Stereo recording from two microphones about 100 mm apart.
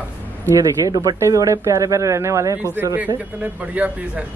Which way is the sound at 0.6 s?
35° right (ahead or behind).